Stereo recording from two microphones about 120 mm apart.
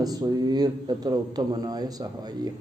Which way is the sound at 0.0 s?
35° right (ahead or behind).